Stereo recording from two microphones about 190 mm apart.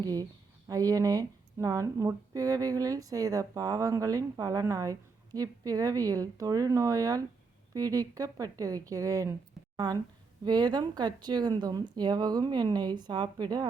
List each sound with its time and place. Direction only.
0.0 s speech: 20° right (ahead or behind)